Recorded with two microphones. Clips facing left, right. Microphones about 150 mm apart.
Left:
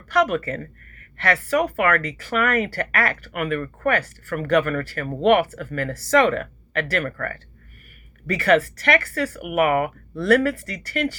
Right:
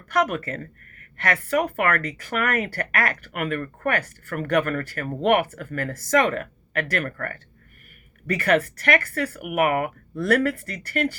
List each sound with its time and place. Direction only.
0.1 s speech: 45° right (ahead or behind)